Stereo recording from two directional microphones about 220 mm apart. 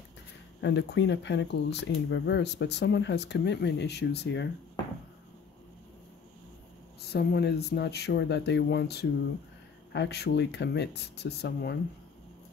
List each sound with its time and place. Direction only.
0.6 s speech: 55° left (ahead or behind)
7.0 s speech: 50° left (ahead or behind)